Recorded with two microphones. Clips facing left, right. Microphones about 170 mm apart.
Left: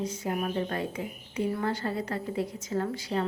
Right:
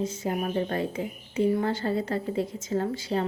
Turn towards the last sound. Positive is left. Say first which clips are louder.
# right 3 dB
turn(degrees=-25)  # may be behind; listen again after turning